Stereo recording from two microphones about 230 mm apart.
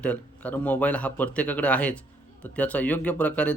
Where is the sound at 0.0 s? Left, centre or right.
Centre.